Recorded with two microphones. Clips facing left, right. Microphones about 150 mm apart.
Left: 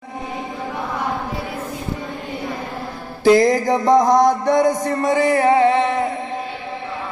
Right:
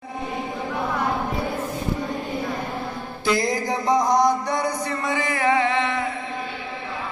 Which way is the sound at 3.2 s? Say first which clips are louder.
Left 9 dB; 50° left (ahead or behind).